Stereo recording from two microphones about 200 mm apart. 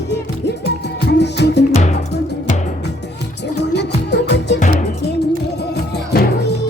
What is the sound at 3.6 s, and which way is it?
Music, 60° left (ahead or behind).